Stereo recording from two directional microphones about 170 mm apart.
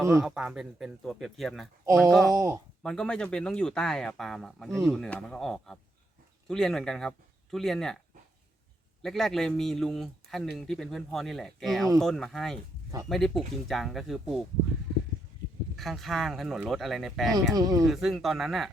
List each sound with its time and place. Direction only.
0.0 s speech: 20° right (ahead or behind)
0.3 s speech: 5° right (ahead or behind)
2.3 s speech: 20° right (ahead or behind)
2.8 s speech: 5° left (ahead or behind)
9.0 s speech: centre (ahead or behind)
15.7 s speech: centre (ahead or behind)
17.5 s speech: 20° right (ahead or behind)
17.8 s speech: centre (ahead or behind)